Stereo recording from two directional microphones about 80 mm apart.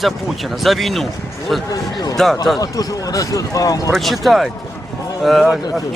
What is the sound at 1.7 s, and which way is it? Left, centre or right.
Speech, left.